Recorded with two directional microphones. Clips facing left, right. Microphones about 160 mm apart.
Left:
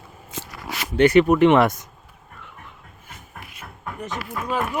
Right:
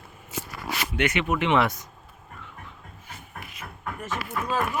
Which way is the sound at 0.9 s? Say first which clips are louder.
Left 11 dB; 35° left (ahead or behind).